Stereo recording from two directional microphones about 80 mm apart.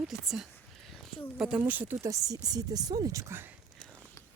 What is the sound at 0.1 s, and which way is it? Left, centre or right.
Speech, centre.